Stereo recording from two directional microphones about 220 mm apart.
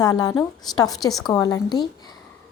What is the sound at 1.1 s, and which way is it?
Speech, centre (ahead or behind).